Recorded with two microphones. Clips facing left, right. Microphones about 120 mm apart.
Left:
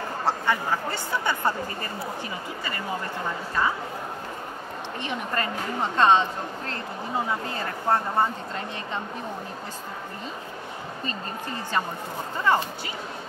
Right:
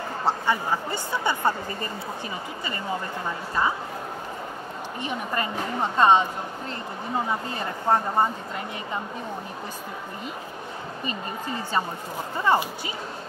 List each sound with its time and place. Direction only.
0.3 s speech: 15° right (ahead or behind)
5.0 s speech: 15° right (ahead or behind)
7.2 s speech: 20° right (ahead or behind)
11.1 s speech: 15° right (ahead or behind)